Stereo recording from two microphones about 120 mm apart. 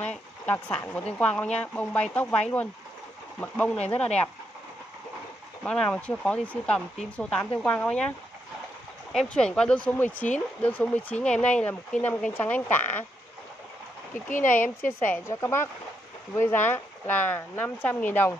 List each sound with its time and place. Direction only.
0.0 s speech: 10° left (ahead or behind)
5.6 s speech: 10° left (ahead or behind)
9.1 s speech: 5° left (ahead or behind)
14.5 s speech: 15° left (ahead or behind)